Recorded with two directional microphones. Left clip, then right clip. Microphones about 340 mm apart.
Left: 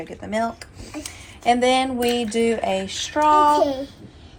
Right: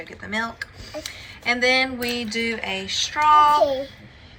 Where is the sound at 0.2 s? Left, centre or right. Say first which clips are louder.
Left 2 dB; centre.